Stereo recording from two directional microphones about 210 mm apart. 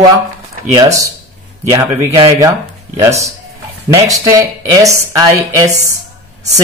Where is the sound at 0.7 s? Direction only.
15° right (ahead or behind).